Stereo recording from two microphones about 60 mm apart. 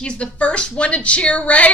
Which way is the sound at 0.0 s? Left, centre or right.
Centre.